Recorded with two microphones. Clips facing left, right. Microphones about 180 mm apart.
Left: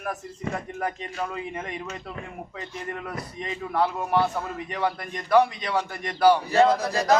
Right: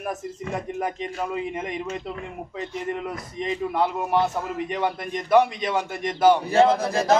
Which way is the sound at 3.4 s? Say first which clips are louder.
Right 2 dB; 20° right (ahead or behind).